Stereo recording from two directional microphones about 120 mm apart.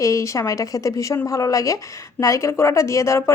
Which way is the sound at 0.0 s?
25° left (ahead or behind).